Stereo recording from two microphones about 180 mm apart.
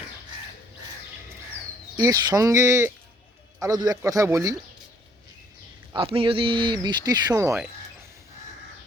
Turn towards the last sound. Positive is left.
turn(degrees=-15)  # may be behind; listen again after turning